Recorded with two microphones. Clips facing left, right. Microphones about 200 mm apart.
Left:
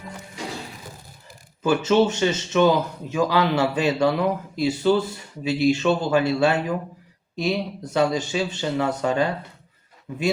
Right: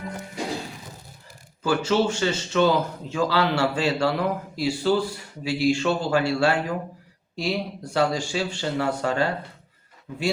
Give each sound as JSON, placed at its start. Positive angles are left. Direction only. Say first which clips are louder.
{"t": 1.6, "sound": "a man's voice", "louder": "left 3 dB", "side_deg": 20}